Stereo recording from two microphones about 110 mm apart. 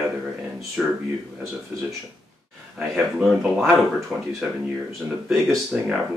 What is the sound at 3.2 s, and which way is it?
Speech, 5° right (ahead or behind).